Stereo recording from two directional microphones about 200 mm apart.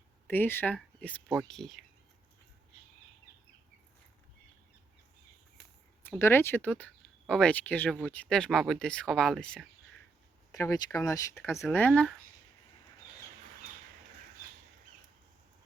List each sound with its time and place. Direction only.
0.3 s speech: 10° left (ahead or behind)
6.0 s speech: 10° left (ahead or behind)
10.5 s speech: 15° left (ahead or behind)